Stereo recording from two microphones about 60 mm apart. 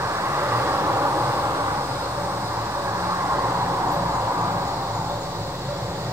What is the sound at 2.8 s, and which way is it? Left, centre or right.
Vehicle, right.